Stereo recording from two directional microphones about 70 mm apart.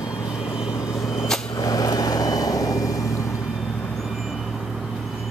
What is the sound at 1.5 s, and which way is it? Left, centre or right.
Vehicle, left.